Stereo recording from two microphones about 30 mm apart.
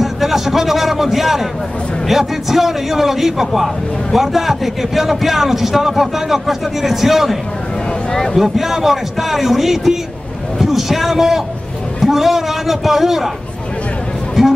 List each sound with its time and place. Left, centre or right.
0.0 s a man's voice: centre
8.1 s speech: left
8.4 s a man's voice: centre
14.4 s music: centre